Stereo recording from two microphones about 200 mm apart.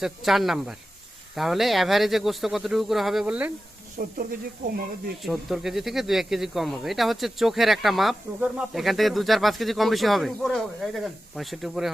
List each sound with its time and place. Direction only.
0.0 s speech: centre (ahead or behind)
3.9 s speech: 45° right (ahead or behind)
5.2 s speech: centre (ahead or behind)